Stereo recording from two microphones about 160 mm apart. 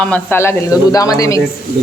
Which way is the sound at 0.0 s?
10° left (ahead or behind).